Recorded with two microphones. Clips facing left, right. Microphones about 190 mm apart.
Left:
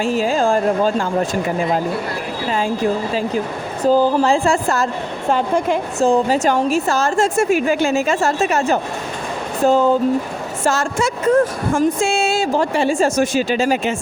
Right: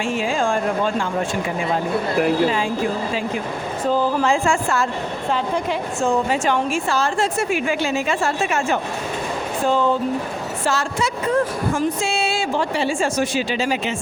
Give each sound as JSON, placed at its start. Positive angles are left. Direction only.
{"t": 0.0, "sound": "a woman's voice", "side_deg": 40}
{"t": 3.8, "sound": "a woman's voice", "side_deg": 35}
{"t": 5.3, "sound": "a woman's voice", "side_deg": 50}
{"t": 6.1, "sound": "a woman's voice", "side_deg": 35}